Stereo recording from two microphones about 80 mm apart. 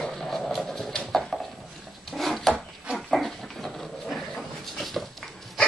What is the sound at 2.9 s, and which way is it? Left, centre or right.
Dog, centre.